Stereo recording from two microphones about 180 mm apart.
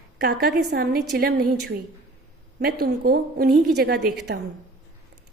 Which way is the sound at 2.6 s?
55° right (ahead or behind).